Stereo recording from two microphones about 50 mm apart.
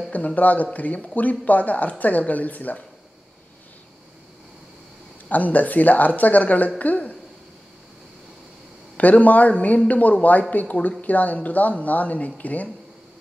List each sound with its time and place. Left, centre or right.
0.1 s speech: left
5.3 s a woman's voice: left
8.9 s speech: left